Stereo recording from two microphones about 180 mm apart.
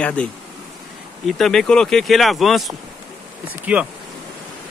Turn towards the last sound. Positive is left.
turn(degrees=-5)  # may be behind; listen again after turning